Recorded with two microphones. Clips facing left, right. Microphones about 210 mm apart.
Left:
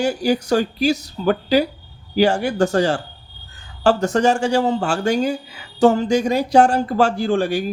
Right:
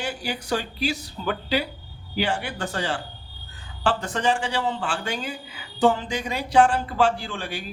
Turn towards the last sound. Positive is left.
turn(degrees=45)  # may be behind; listen again after turning